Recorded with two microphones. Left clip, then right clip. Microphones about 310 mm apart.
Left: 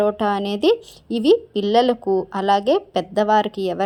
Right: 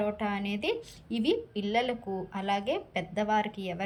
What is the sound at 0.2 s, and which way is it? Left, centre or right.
Speech, centre.